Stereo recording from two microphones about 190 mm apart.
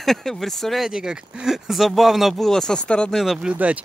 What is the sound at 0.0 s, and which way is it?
A man's voice, centre (ahead or behind).